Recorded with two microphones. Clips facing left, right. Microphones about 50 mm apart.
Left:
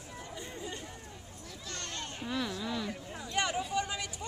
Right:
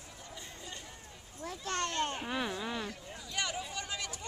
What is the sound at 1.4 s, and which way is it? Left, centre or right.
Children playing, right.